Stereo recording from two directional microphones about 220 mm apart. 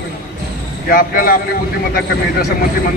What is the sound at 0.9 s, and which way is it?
Speech, 40° left (ahead or behind).